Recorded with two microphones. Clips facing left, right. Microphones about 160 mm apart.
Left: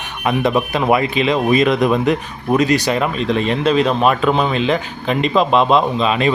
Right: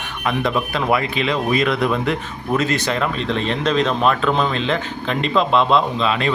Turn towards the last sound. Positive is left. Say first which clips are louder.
# left 3 dB
turn(degrees=15)  # may be behind; listen again after turning